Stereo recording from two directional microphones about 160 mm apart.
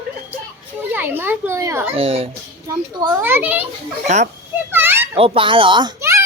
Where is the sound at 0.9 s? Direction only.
15° right (ahead or behind).